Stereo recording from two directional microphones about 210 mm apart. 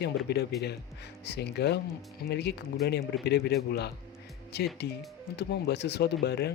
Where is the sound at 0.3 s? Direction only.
50° left (ahead or behind).